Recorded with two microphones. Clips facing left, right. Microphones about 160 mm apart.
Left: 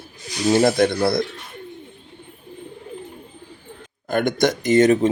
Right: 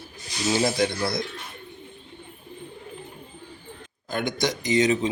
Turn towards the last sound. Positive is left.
turn(degrees=50)  # may be behind; listen again after turning